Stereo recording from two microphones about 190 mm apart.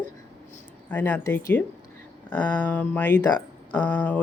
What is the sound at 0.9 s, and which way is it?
Speech, 10° left (ahead or behind).